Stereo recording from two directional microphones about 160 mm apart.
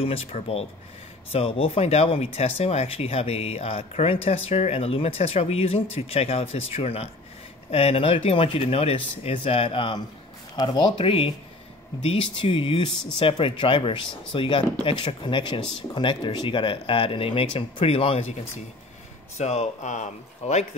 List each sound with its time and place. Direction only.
0.0 s speech: 35° left (ahead or behind)
19.3 s speech: 45° left (ahead or behind)